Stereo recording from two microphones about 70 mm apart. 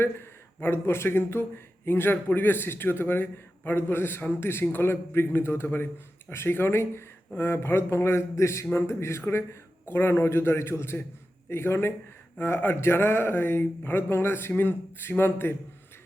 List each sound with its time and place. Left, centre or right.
0.0 s speech: left